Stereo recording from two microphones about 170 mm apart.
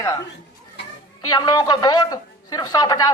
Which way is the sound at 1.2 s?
25° left (ahead or behind).